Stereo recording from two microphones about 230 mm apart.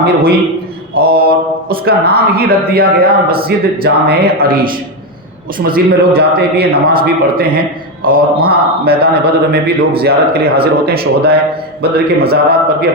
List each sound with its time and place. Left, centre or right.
0.9 s a man's voice: right